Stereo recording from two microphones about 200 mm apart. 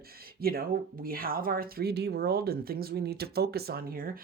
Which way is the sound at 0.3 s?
50° right (ahead or behind).